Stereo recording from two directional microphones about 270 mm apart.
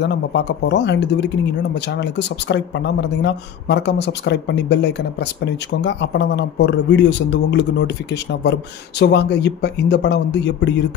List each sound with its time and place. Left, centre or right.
0.0 s speech: left